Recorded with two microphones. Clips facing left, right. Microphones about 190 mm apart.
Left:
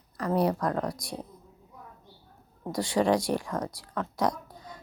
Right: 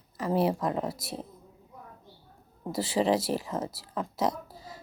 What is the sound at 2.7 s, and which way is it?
A woman's voice, 5° right (ahead or behind).